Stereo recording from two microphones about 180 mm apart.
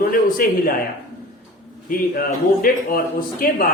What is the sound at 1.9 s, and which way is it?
A man's voice, 55° left (ahead or behind).